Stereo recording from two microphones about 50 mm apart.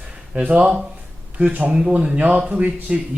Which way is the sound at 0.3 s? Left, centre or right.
Right.